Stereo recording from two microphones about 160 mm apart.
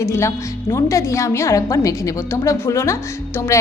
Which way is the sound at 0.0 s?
15° left (ahead or behind).